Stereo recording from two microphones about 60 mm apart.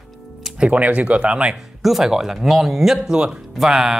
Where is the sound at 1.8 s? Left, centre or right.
Centre.